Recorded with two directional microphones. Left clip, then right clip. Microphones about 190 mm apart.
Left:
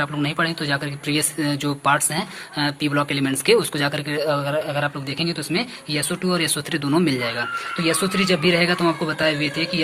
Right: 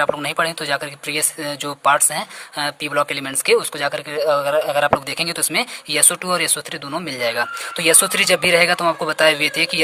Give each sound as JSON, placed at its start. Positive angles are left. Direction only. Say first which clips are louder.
{"t": 0.0, "sound": "speech", "louder": "right 4 dB", "side_deg": -35}
{"t": 6.8, "sound": "speech", "louder": "left 8 dB", "side_deg": -25}
{"t": 7.2, "sound": "speech", "louder": "right 3 dB", "side_deg": -40}